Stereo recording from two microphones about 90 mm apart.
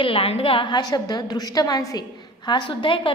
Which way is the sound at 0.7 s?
50° left (ahead or behind).